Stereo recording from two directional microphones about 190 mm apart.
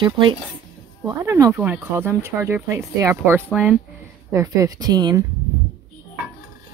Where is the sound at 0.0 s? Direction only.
25° right (ahead or behind); by 3.8 s 5° right (ahead or behind).